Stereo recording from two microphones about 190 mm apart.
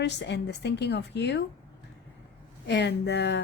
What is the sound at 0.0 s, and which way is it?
A woman's voice, 65° left (ahead or behind).